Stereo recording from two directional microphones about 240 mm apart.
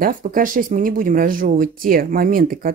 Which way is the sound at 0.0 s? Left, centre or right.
Right.